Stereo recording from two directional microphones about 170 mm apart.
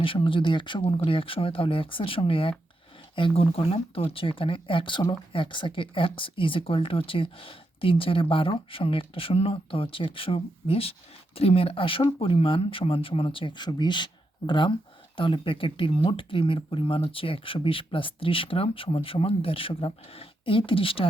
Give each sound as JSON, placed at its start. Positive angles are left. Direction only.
{"t": 0.0, "sound": "speech", "side_deg": 30}